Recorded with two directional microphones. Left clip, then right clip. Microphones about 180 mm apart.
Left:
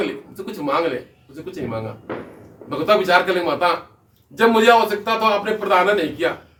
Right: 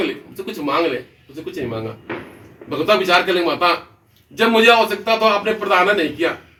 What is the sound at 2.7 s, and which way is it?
A man's voice, 15° left (ahead or behind).